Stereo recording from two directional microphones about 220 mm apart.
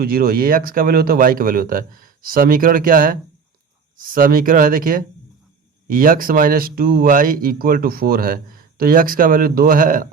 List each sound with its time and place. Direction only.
0.0 s speech: 40° right (ahead or behind)